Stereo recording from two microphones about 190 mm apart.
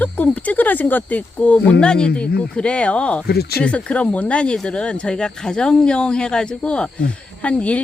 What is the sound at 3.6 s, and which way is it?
Speech, 5° left (ahead or behind).